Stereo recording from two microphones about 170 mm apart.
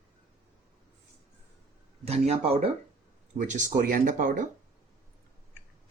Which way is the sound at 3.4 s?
50° right (ahead or behind).